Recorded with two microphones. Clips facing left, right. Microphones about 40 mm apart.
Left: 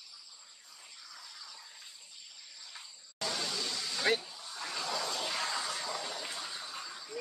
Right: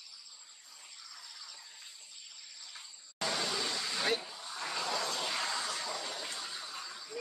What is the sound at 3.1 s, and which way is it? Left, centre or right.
Vehicle, centre.